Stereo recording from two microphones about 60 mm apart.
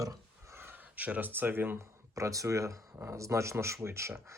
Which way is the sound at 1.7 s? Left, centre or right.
Right.